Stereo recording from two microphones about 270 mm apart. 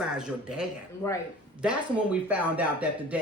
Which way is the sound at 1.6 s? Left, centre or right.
Centre.